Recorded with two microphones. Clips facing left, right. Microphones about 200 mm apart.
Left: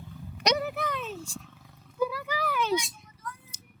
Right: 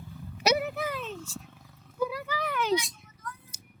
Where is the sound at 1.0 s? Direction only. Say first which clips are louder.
Left 1 dB; 10° left (ahead or behind).